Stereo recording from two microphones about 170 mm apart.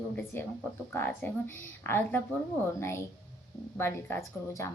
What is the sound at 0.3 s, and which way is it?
A woman's voice, 15° left (ahead or behind).